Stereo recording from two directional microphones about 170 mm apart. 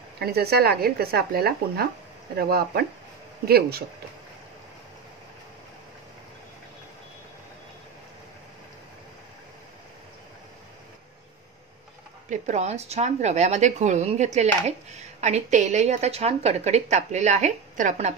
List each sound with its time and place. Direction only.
0.2 s speech: 70° right (ahead or behind)
12.3 s a woman's voice: 45° right (ahead or behind)